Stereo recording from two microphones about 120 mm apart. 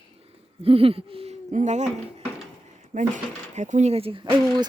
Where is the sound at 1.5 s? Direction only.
75° right (ahead or behind).